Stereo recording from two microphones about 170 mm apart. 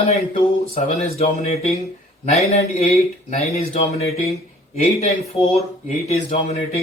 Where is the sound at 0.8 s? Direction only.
40° left (ahead or behind).